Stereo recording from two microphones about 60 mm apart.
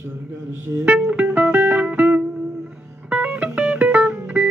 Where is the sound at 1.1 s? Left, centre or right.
Right.